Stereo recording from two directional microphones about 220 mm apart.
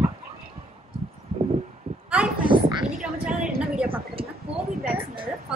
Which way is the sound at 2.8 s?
5° right (ahead or behind).